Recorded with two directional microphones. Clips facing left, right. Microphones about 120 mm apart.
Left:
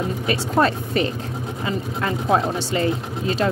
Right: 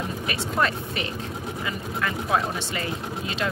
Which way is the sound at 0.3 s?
35° left (ahead or behind).